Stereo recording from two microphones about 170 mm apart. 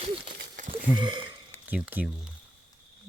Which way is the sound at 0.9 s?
30° right (ahead or behind).